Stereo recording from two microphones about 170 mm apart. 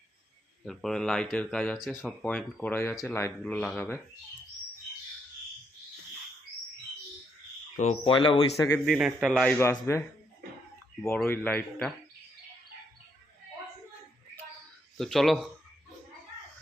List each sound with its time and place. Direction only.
0.6 s speech: centre (ahead or behind)
2.2 s speech: 10° left (ahead or behind)
7.8 s speech: 40° left (ahead or behind)
8.1 s speech: 30° left (ahead or behind)
8.5 s speech: 20° left (ahead or behind)
8.9 s speech: 5° right (ahead or behind)
9.6 s speech: 15° left (ahead or behind)
11.1 s speech: 10° left (ahead or behind)
14.9 s speech: centre (ahead or behind)